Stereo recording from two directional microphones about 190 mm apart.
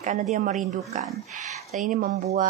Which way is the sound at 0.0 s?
40° right (ahead or behind).